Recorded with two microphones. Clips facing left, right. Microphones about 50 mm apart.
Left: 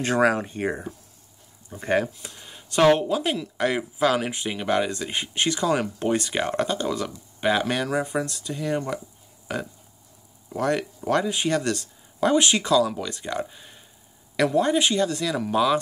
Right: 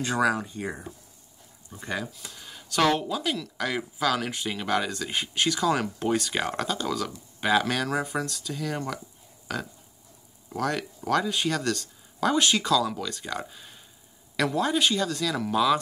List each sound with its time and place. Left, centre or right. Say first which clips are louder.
0.0 s speech: left 4 dB; left
1.8 s speech: left 9 dB; left
2.3 s speech: left 3 dB; left
4.3 s speech: left 2 dB; centre